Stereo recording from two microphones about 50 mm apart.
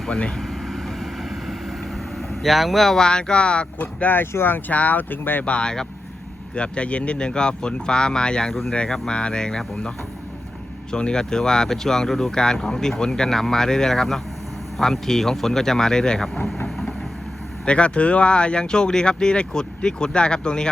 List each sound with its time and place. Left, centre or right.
0.1 s speech: left
0.3 s vehicle: centre
2.9 s speech: centre
3.8 s speech: left
4.7 s speech: left
5.5 s speech: centre
10.9 s speech: centre
16.6 s vehicle: centre
17.7 s speech: left